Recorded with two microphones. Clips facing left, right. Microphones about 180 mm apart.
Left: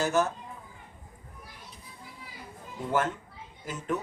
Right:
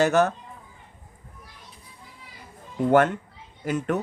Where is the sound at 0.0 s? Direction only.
70° right (ahead or behind).